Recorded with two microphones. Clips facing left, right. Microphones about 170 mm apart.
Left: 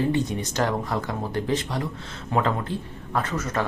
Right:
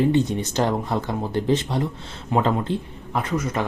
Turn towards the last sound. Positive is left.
turn(degrees=-15)  # may be behind; listen again after turning